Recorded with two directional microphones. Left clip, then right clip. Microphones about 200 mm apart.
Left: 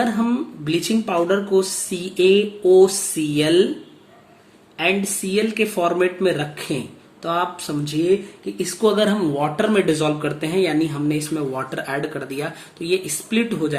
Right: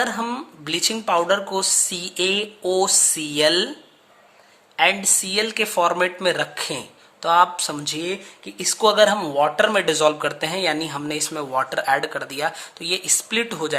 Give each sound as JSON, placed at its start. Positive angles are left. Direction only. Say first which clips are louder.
{"t": 0.0, "sound": "speech", "louder": "left 2 dB", "side_deg": -45}
{"t": 4.8, "sound": "speech", "louder": "right 2 dB", "side_deg": -50}